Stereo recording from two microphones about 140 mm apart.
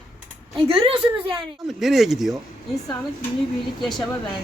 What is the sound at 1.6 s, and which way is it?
Speech, centre (ahead or behind).